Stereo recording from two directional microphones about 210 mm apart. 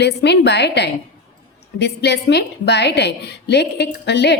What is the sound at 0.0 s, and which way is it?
A woman's voice, 55° left (ahead or behind).